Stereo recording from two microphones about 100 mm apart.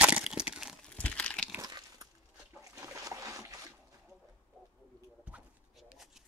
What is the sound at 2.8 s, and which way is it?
Boat, 30° right (ahead or behind).